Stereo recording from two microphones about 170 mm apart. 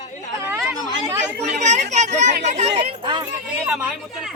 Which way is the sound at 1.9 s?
45° right (ahead or behind).